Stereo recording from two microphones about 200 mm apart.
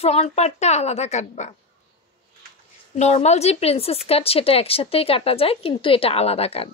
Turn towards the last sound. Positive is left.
turn(degrees=30)  # may be behind; listen again after turning